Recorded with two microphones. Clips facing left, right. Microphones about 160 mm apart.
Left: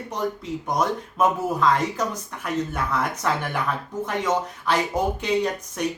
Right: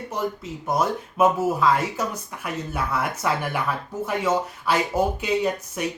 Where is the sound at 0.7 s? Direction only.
5° right (ahead or behind).